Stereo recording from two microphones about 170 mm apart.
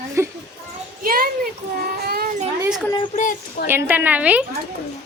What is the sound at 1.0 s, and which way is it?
Speech, 60° right (ahead or behind).